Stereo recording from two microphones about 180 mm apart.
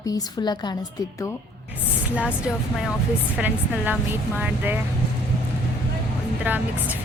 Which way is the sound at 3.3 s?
10° right (ahead or behind).